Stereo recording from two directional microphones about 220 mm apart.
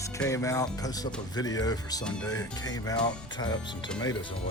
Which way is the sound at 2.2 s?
15° left (ahead or behind).